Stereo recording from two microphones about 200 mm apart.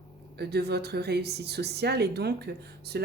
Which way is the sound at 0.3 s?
55° right (ahead or behind).